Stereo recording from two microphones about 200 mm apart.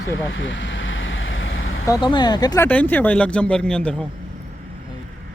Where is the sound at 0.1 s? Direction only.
70° left (ahead or behind).